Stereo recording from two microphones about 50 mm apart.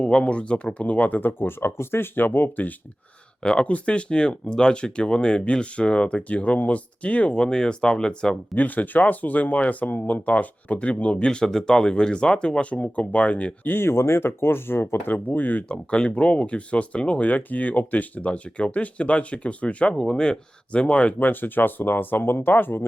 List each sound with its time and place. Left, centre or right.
0.0 s speech: left
1.2 s speech: left
3.4 s speech: left
8.5 s speech: left
12.8 s speech: left
13.7 s speech: left
15.7 s speech: left
21.2 s speech: left